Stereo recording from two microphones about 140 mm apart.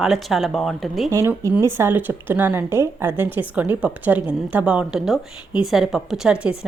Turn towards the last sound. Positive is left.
turn(degrees=-5)  # may be behind; listen again after turning